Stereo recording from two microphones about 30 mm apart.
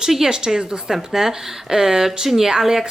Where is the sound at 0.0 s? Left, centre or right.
Centre.